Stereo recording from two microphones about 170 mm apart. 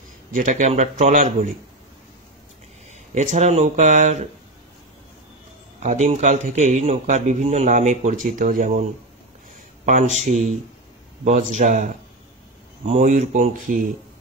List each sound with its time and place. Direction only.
0.3 s a man's voice: 45° right (ahead or behind)
3.2 s a man's voice: 40° right (ahead or behind)
5.8 s a man's voice: 45° right (ahead or behind)
10.2 s a man's voice: 40° right (ahead or behind)